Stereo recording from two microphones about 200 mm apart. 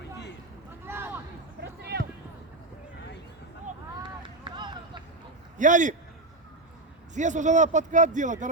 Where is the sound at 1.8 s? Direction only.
55° right (ahead or behind).